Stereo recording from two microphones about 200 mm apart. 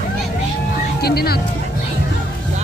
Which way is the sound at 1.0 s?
50° left (ahead or behind).